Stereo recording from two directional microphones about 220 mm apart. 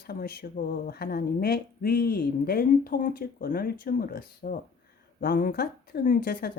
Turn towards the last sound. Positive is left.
turn(degrees=45)  # may be behind; listen again after turning